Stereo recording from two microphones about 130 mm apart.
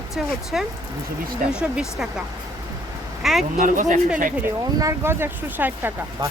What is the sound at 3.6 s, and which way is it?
Speech, 80° right.